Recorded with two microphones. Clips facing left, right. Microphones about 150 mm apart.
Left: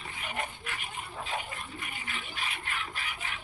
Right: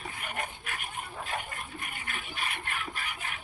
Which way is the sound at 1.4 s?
50° right (ahead or behind).